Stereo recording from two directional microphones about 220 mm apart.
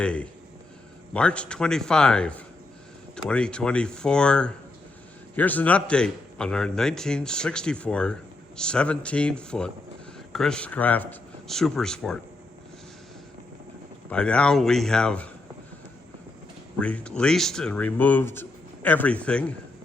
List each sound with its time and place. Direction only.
0.0 s a man's voice: 5° left (ahead or behind)
14.1 s a man's voice: 5° left (ahead or behind)
16.8 s a man's voice: 5° left (ahead or behind)